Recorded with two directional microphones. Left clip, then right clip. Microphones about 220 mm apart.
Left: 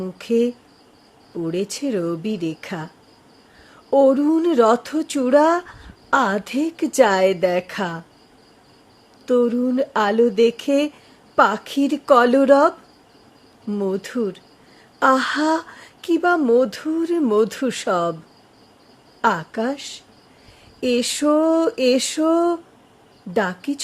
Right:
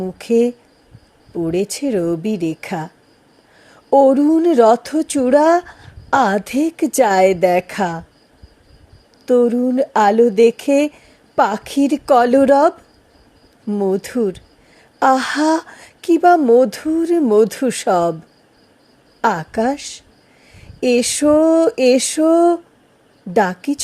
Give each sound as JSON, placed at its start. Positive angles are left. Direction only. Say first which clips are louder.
{"t": 0.0, "sound": "speech", "louder": "right 4 dB", "side_deg": -20}
{"t": 9.2, "sound": "speech", "louder": "right 4 dB", "side_deg": -20}
{"t": 19.2, "sound": "speech", "louder": "right 3 dB", "side_deg": -25}